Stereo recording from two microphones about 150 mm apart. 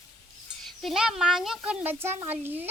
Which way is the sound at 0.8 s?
Centre (ahead or behind).